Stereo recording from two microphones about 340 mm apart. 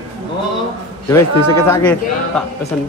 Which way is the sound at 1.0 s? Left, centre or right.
Centre.